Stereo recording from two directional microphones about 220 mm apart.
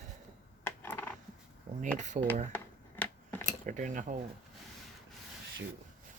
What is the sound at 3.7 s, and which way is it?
Speech, 35° right (ahead or behind).